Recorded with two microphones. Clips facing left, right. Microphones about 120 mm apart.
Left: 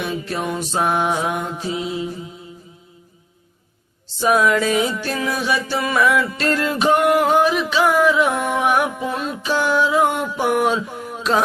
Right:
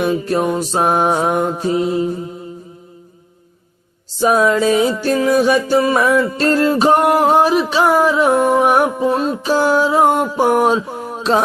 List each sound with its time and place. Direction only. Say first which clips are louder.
0.0 s mantra: right 8 dB; 45° right (ahead or behind)
4.2 s music: right 3 dB; 30° right (ahead or behind)